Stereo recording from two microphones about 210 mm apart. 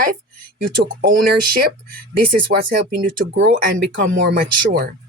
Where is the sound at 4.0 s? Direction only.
60° right (ahead or behind).